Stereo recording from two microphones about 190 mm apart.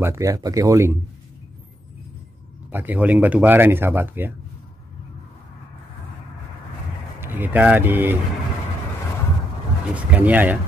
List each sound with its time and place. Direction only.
0.0 s speech: 15° right (ahead or behind)
2.7 s speech: 10° right (ahead or behind)
7.2 s speech: 10° right (ahead or behind)
9.9 s speech: 10° right (ahead or behind)